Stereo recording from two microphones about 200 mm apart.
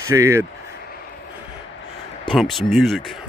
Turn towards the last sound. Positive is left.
turn(degrees=0)  # may be behind; listen again after turning